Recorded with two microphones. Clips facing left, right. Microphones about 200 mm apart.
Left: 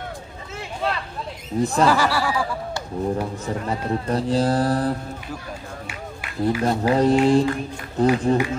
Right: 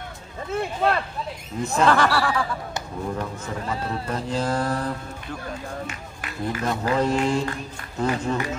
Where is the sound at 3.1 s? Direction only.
35° left (ahead or behind).